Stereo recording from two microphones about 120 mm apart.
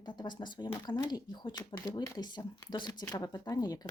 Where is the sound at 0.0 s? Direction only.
40° left (ahead or behind).